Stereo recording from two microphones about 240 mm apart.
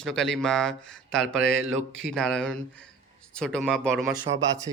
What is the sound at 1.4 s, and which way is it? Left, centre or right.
Speech, right.